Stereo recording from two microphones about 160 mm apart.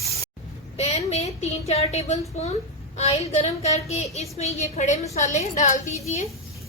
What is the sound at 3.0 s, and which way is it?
A woman's voice, 45° left (ahead or behind).